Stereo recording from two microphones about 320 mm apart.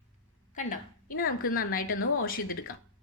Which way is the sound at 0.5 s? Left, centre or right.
Left.